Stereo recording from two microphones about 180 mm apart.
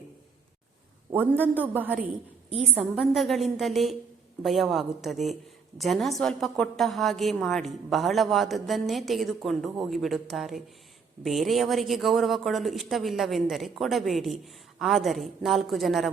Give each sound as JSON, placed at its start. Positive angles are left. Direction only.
{"t": 1.1, "sound": "a man's voice", "side_deg": -10}